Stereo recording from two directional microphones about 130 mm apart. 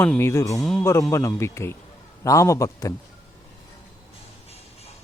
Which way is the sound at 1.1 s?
20° left (ahead or behind).